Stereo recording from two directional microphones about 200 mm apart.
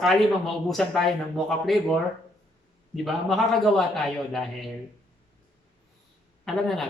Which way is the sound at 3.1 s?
Centre (ahead or behind).